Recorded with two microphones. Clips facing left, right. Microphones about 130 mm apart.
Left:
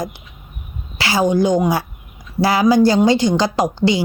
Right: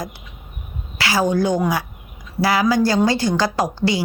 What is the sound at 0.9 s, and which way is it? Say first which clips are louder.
A woman's voice: left 3 dB; 25° left (ahead or behind).